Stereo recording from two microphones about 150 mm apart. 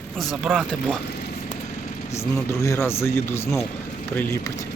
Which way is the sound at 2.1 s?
20° left (ahead or behind).